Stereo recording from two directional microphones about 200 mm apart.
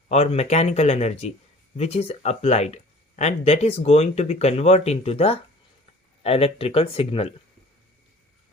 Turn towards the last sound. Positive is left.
turn(degrees=30)  # may be behind; listen again after turning